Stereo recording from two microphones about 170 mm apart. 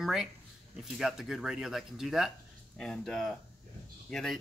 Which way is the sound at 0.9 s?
Centre (ahead or behind).